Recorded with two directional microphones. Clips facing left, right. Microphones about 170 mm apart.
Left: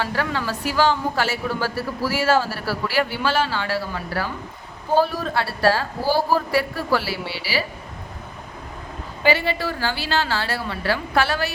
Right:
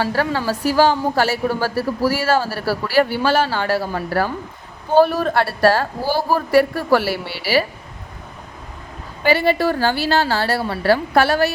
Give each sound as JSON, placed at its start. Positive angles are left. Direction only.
{"t": 0.0, "sound": "a woman's voice", "side_deg": -35}
{"t": 4.9, "sound": "a man's voice", "side_deg": -60}
{"t": 9.3, "sound": "a woman's voice", "side_deg": -45}